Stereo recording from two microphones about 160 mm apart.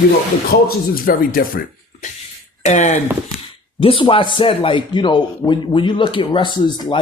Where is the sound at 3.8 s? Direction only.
35° left (ahead or behind).